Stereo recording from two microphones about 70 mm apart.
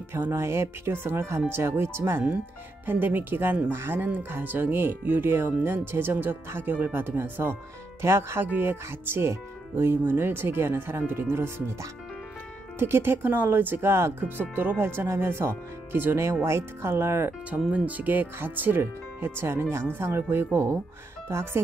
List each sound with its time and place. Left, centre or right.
0.1 s speech: right
17.6 s speech: centre; by 20.8 s right